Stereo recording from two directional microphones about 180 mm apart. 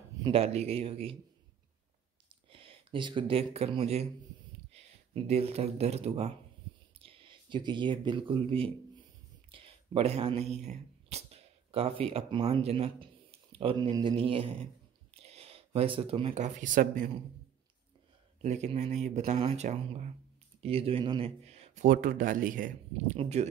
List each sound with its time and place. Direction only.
0.2 s speech: 35° right (ahead or behind)
2.5 s speech: 30° right (ahead or behind); by 17.1 s 45° right (ahead or behind)
18.4 s speech: 40° right (ahead or behind)
21.5 s a sound: 35° right (ahead or behind)
21.8 s speech: 50° right (ahead or behind)
23.1 s speech: 35° right (ahead or behind)